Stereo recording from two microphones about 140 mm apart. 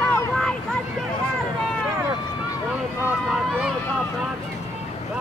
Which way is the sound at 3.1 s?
10° right (ahead or behind).